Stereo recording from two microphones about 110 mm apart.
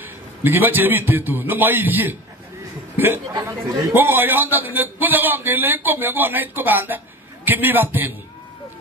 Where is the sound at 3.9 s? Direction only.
20° right (ahead or behind).